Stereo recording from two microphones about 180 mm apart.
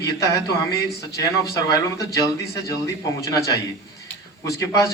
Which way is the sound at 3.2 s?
20° left (ahead or behind).